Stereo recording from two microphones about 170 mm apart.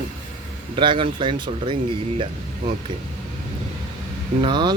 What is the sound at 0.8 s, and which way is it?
Speech, 30° right (ahead or behind).